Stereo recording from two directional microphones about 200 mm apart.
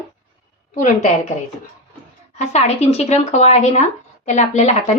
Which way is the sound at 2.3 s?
35° left (ahead or behind).